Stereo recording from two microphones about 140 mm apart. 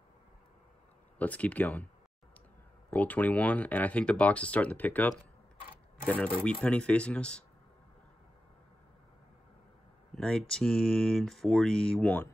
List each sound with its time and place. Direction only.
1.1 s speech: 10° left (ahead or behind)
2.9 s speech: 10° left (ahead or behind)
10.1 s speech: 5° left (ahead or behind)